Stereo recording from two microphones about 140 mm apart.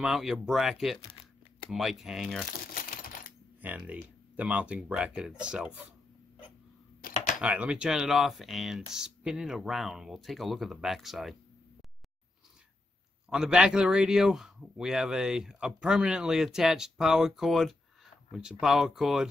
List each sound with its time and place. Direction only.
0.0 s a man's voice: 5° right (ahead or behind)
2.6 s typewriter: 90° left
3.6 s speech: 10° right (ahead or behind)
7.0 s computer keyboard: 90° left
7.4 s a man's voice: 10° right (ahead or behind)
13.3 s a man's voice: 5° right (ahead or behind)